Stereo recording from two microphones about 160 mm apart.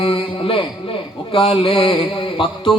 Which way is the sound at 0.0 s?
35° left (ahead or behind).